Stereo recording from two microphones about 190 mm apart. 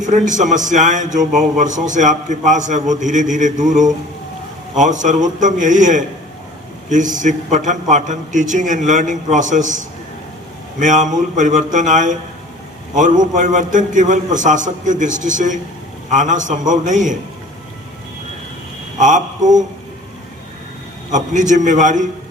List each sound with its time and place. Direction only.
0.0 s a man's voice: 40° right (ahead or behind)
18.9 s speech: 40° right (ahead or behind)
21.1 s a man's voice: 40° right (ahead or behind)